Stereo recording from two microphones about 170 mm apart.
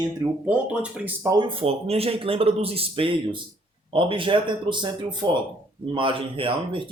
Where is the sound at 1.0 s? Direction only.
15° right (ahead or behind).